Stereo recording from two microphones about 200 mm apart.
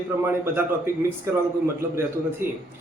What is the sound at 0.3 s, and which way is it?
A man's voice, 10° right (ahead or behind).